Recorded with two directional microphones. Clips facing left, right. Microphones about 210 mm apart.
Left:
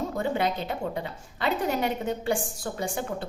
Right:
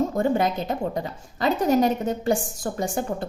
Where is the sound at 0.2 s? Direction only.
45° right (ahead or behind).